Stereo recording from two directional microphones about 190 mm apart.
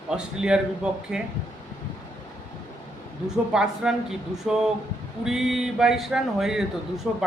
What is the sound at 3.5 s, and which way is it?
Speech, 5° right (ahead or behind).